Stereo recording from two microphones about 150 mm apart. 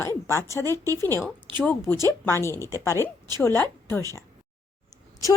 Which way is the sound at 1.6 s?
15° left (ahead or behind).